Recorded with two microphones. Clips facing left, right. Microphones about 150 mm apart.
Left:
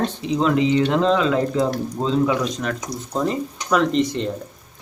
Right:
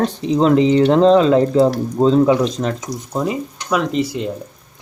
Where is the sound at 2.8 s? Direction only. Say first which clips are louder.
Right 2 dB; 10° right (ahead or behind).